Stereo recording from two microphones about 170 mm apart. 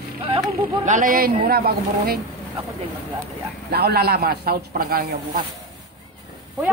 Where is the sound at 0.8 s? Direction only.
50° right (ahead or behind); by 2.1 s 65° right (ahead or behind).